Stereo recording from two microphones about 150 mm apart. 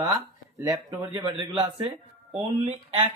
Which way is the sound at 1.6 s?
35° right (ahead or behind).